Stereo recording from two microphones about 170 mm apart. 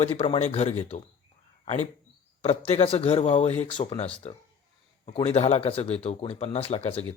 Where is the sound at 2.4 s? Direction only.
35° left (ahead or behind).